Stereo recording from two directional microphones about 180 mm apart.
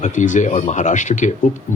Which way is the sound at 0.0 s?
45° left (ahead or behind).